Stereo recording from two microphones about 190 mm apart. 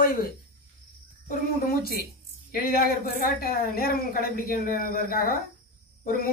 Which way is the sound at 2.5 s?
55° left (ahead or behind).